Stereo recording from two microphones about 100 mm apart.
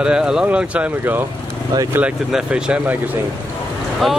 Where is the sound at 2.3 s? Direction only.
10° right (ahead or behind).